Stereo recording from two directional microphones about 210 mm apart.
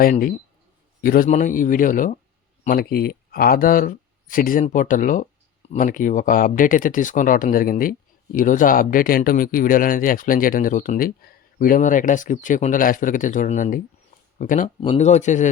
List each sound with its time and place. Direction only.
0.0 s speech: 40° left (ahead or behind)